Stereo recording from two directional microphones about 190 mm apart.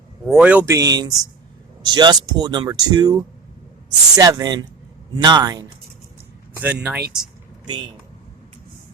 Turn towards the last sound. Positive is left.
turn(degrees=-25)  # may be behind; listen again after turning